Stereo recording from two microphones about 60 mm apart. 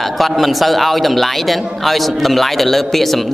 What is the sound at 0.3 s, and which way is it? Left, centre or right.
A man's voice, centre.